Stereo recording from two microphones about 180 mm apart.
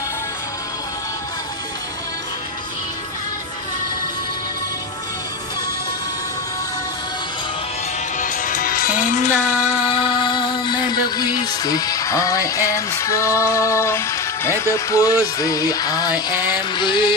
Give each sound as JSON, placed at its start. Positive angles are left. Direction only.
{"t": 8.2, "sound": "music", "side_deg": 50}
{"t": 9.8, "sound": "music", "side_deg": 25}
{"t": 16.3, "sound": "a sound", "side_deg": 25}